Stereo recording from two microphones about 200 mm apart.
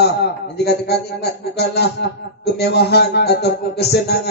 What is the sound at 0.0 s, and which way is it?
A man's voice, 55° left (ahead or behind).